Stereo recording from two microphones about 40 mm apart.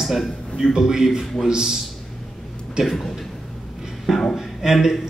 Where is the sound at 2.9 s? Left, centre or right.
Centre.